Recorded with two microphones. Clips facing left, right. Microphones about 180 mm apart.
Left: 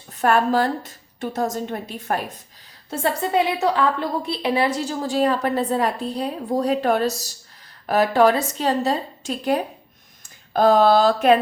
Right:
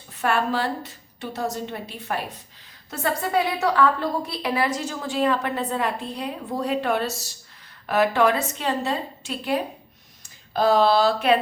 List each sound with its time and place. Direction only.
0.1 s a woman's voice: 40° left (ahead or behind)
2.9 s a woman's voice: 25° left (ahead or behind); by 11.3 s 45° left (ahead or behind)